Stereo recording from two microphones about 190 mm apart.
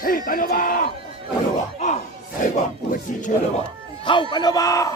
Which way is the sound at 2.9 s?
40° left (ahead or behind).